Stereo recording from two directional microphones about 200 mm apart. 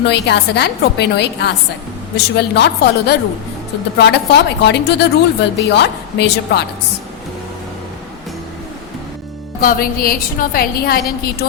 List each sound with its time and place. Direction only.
0.0 s a woman's voice: 55° left (ahead or behind)
9.6 s a woman's voice: 45° left (ahead or behind)